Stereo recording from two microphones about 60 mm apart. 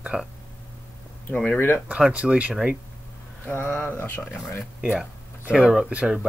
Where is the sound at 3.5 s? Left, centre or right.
Left.